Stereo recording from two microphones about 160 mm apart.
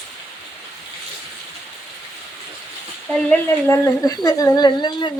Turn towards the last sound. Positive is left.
turn(degrees=25)  # may be behind; listen again after turning